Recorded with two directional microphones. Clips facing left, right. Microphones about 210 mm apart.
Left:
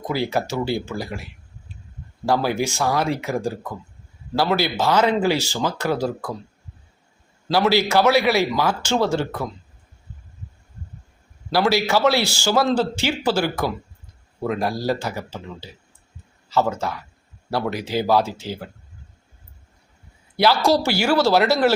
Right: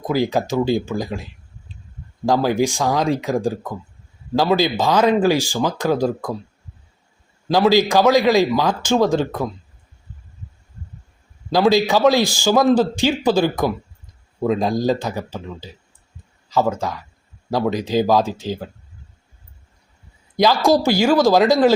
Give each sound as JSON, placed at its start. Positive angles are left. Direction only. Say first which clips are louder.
{"t": 0.0, "sound": "a man's voice", "louder": "right 4 dB", "side_deg": -15}
{"t": 7.4, "sound": "a man's voice", "louder": "right 4 dB", "side_deg": -15}
{"t": 11.5, "sound": "a man's voice", "louder": "right 4 dB", "side_deg": -15}
{"t": 20.3, "sound": "a man's voice", "louder": "right 2 dB", "side_deg": -15}